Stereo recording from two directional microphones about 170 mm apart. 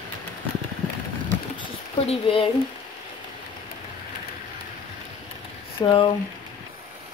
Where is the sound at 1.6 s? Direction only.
30° left (ahead or behind).